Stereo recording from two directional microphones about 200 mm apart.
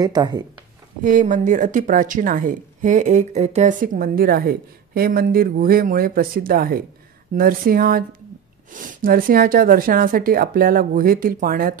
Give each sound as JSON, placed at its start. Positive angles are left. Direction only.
{"t": 0.0, "sound": "speech", "side_deg": -20}
{"t": 1.0, "sound": "speech", "side_deg": -40}